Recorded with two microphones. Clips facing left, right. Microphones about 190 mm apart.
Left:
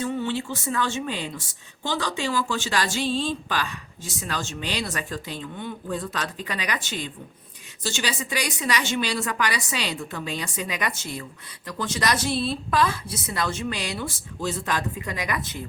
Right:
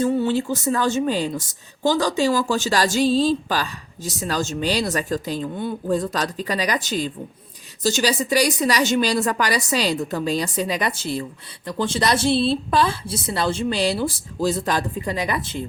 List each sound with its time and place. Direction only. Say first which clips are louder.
0.0 s a woman's voice: right 7 dB; 40° right (ahead or behind)